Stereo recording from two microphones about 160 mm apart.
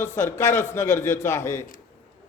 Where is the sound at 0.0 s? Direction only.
15° left (ahead or behind).